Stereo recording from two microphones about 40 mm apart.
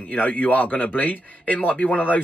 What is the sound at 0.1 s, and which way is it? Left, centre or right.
Speech, left.